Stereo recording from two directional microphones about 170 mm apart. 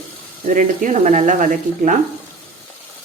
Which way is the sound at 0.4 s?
50° right (ahead or behind).